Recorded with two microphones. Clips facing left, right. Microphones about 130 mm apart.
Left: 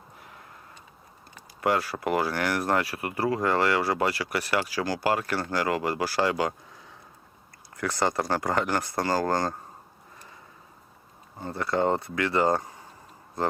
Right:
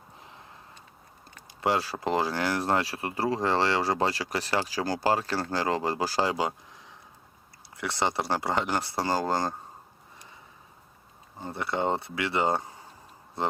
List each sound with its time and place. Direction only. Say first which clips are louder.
2.0 s speech: left 1 dB; 20° right (ahead or behind)
6.1 s speech: left 3 dB; 15° right (ahead or behind)
7.8 s speech: left 2 dB; 20° right (ahead or behind)
11.4 s speech: left 3 dB; 20° right (ahead or behind)